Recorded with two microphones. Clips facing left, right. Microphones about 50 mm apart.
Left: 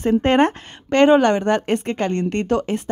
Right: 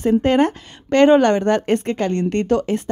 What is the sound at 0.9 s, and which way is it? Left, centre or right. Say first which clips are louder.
Speech: right 1 dB; left.